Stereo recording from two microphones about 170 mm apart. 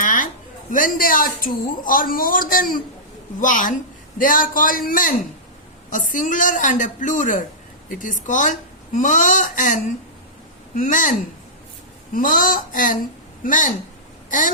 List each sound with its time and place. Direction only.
0.0 s music: 50° left (ahead or behind)
0.7 s a woman's voice: 55° left (ahead or behind)
12.1 s a woman's voice: 50° left (ahead or behind)
14.3 s throat clearing: 50° left (ahead or behind)